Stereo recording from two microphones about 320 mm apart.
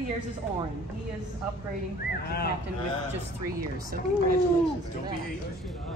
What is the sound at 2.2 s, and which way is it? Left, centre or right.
Speech, left.